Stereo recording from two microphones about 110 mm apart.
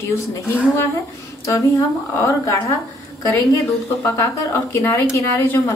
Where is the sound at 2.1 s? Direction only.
25° left (ahead or behind).